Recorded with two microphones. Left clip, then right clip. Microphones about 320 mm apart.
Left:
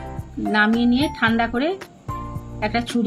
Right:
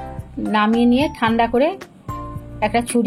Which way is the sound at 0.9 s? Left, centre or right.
Centre.